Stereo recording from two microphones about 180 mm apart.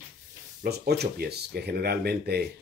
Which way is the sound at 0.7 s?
60° right (ahead or behind).